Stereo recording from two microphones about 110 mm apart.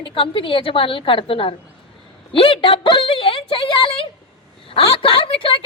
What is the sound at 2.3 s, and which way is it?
A woman's voice, 55° left (ahead or behind).